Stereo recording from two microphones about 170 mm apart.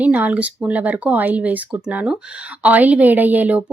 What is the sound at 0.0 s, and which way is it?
Speech, 10° right (ahead or behind).